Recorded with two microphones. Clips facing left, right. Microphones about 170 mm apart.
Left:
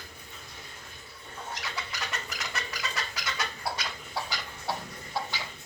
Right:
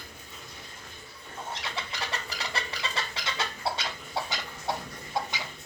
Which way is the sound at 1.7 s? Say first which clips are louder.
Right 2 dB; 30° right (ahead or behind).